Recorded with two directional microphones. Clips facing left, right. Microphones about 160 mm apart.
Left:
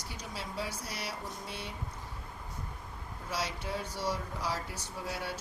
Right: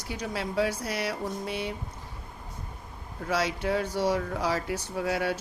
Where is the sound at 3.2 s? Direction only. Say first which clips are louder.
Right 9 dB; 85° right.